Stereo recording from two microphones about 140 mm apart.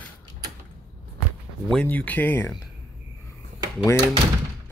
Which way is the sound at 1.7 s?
10° left (ahead or behind).